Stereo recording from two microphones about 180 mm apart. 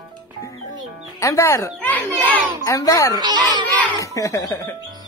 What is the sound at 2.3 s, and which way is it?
Speech, 15° left (ahead or behind).